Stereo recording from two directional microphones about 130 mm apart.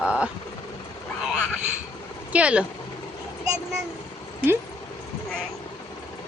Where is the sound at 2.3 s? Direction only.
10° right (ahead or behind).